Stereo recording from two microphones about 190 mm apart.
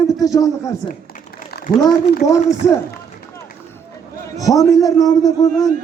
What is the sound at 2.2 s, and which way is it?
Speech, 15° left (ahead or behind).